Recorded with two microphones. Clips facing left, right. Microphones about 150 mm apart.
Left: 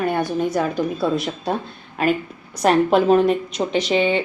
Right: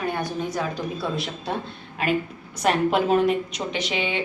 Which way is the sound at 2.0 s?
45° left (ahead or behind).